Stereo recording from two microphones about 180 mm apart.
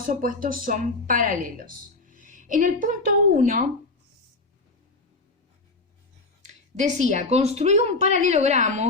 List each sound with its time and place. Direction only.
0.0 s speech: 50° right (ahead or behind)
6.4 s a woman's voice: 40° right (ahead or behind)